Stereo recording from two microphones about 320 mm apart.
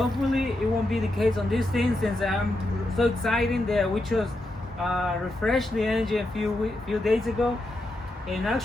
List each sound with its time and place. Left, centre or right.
0.0 s speech: centre